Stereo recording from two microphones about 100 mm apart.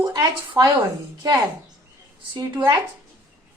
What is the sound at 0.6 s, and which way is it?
Speech, 45° right (ahead or behind).